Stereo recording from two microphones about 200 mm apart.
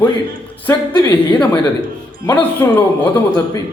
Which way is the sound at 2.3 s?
10° left (ahead or behind).